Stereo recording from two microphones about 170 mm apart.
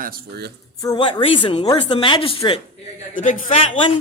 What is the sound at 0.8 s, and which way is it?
A woman's voice, 25° left (ahead or behind).